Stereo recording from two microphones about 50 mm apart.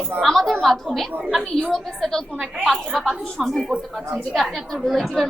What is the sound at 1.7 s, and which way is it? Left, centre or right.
Speech, centre.